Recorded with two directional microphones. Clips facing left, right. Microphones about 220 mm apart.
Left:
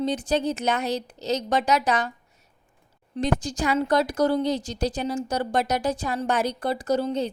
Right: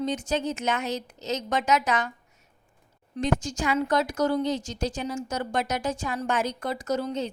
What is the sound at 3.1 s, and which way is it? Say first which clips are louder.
Speech: left 1 dB; 35° left (ahead or behind).